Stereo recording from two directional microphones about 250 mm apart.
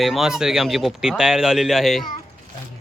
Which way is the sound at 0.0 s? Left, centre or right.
Centre.